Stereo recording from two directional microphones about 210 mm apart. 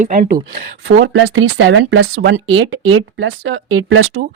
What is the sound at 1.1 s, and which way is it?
Speech, 65° right (ahead or behind).